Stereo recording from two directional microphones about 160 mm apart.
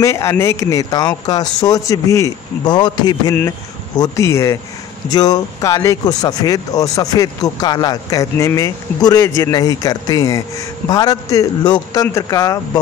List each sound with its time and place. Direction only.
0.0 s speech: 20° left (ahead or behind)